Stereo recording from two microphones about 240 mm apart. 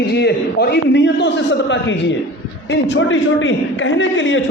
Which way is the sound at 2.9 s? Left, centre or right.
Left.